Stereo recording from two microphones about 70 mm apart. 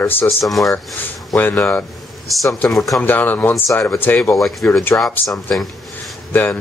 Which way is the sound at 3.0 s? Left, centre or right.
Left.